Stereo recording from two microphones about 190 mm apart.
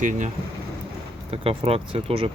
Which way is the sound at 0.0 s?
40° right (ahead or behind).